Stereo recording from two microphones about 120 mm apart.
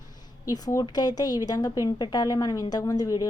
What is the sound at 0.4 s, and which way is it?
A woman's voice, 30° left (ahead or behind).